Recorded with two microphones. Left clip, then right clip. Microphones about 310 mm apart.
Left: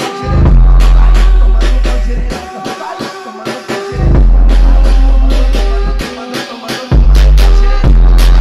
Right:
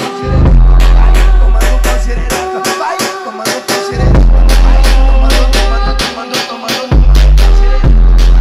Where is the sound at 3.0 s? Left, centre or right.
Right.